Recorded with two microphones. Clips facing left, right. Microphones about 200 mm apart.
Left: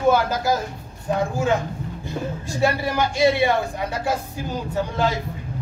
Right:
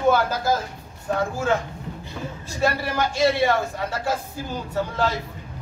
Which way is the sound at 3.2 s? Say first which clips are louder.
Left 1 dB; 15° left (ahead or behind).